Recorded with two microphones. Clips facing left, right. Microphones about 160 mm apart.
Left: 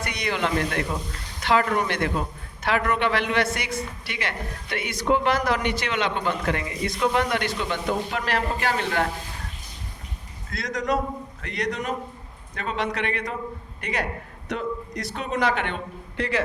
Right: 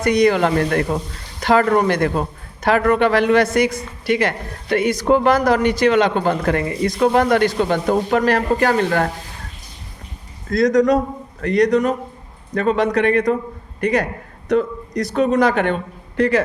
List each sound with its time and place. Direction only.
0.0 s speech: 40° right (ahead or behind)
10.5 s a man's voice: 40° right (ahead or behind)